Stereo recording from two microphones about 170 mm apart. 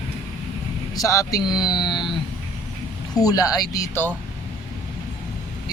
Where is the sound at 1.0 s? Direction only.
20° left (ahead or behind).